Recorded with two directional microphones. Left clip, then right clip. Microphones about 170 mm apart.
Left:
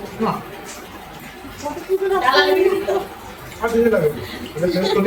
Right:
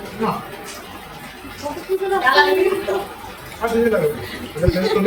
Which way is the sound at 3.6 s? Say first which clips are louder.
Even; 5° left (ahead or behind).